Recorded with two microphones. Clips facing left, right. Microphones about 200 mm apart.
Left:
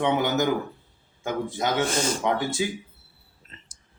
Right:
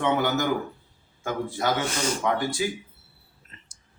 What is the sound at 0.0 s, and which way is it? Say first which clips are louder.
A man's voice: left 1 dB; 20° left (ahead or behind).